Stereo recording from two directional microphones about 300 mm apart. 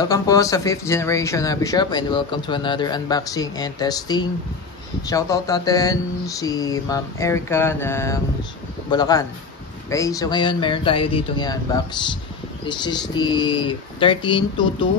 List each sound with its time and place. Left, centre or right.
0.0 s speech: centre